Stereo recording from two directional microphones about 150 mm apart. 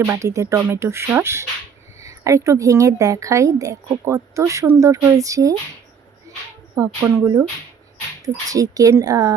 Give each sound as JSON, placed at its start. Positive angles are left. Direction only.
{"t": 0.0, "sound": "a woman's voice", "side_deg": -20}
{"t": 6.7, "sound": "a woman's voice", "side_deg": -20}